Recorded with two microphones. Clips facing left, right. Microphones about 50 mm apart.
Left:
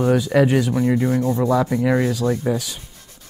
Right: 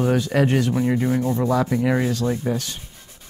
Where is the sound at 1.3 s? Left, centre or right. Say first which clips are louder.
Left 2 dB; centre.